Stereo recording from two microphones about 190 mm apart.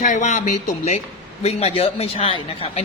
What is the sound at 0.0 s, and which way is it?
A man's voice, 40° left (ahead or behind).